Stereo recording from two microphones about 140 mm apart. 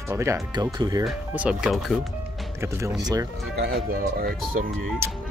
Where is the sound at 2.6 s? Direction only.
20° right (ahead or behind).